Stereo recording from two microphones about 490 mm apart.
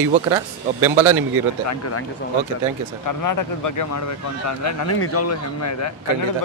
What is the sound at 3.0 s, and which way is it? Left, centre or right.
Speech, left.